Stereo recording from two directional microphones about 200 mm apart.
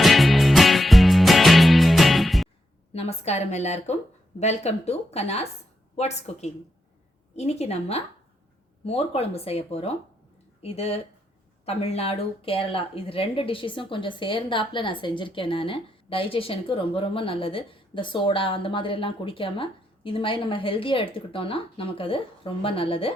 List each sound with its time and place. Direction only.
0.0 s music: centre (ahead or behind)
2.9 s a woman's voice: 30° left (ahead or behind)